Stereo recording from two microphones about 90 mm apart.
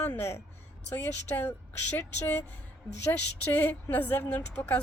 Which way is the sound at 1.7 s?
20° left (ahead or behind).